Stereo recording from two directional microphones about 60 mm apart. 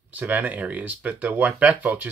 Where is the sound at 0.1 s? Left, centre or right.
Right.